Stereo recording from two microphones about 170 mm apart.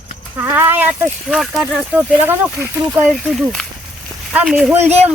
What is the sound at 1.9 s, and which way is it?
Speech, 10° right (ahead or behind).